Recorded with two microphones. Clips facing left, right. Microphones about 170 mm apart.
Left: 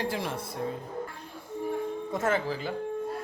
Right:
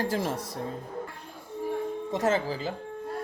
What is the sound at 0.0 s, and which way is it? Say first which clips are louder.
Speech: right 3 dB; 40° right (ahead or behind).